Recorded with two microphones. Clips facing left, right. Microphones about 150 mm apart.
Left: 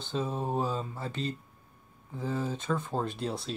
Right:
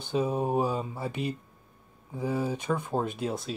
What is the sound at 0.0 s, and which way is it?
Speech, 15° right (ahead or behind).